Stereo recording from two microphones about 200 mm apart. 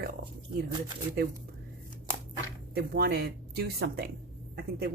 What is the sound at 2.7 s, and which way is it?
Speech, 50° right (ahead or behind).